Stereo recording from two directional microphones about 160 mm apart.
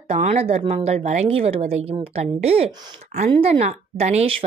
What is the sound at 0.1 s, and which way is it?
A woman's voice, 45° right (ahead or behind).